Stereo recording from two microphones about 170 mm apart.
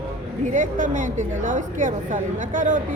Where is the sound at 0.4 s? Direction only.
50° right (ahead or behind).